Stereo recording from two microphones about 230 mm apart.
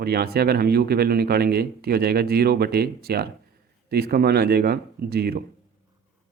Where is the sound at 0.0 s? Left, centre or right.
Right.